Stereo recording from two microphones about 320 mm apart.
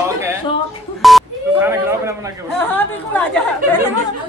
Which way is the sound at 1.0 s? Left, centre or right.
Centre.